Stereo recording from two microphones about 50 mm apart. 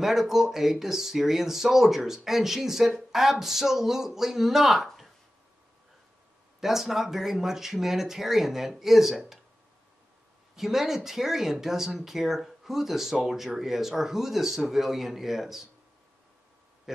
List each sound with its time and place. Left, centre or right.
0.0 s speech: centre
4.8 s a sound: centre
6.6 s speech: centre
10.5 s speech: centre